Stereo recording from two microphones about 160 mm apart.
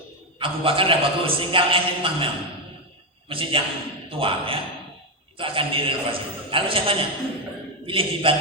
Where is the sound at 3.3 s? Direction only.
35° right (ahead or behind).